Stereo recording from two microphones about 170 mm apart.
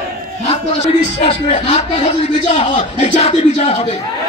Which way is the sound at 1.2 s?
40° left (ahead or behind).